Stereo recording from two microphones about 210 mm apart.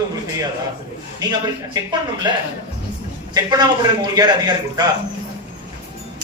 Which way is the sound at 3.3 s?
20° right (ahead or behind).